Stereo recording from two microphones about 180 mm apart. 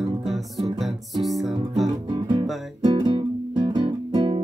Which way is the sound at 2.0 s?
25° right (ahead or behind).